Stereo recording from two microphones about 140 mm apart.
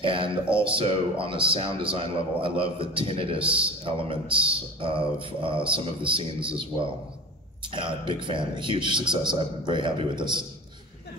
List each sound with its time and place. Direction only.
0.0 s speech: 40° right (ahead or behind)